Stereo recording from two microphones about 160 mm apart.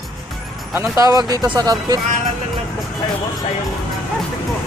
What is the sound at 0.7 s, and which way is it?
Speech, 20° right (ahead or behind).